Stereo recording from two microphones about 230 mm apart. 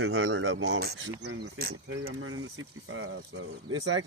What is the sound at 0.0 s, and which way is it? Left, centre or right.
Speech, right.